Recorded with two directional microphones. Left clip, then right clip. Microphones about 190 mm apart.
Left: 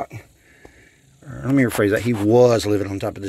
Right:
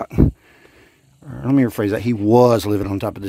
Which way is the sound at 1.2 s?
20° right (ahead or behind).